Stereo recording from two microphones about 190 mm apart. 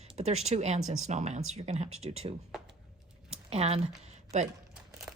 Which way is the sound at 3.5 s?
35° right (ahead or behind).